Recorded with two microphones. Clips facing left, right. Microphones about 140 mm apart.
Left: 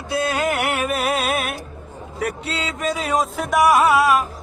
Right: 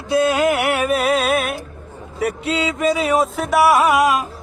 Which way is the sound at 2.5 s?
10° right (ahead or behind).